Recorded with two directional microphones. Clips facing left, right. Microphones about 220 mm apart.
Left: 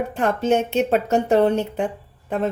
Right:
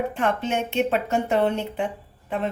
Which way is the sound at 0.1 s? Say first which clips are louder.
Left 5 dB; 40° left (ahead or behind).